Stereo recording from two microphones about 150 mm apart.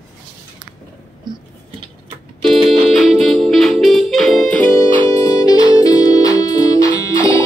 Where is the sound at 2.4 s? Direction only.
Centre (ahead or behind).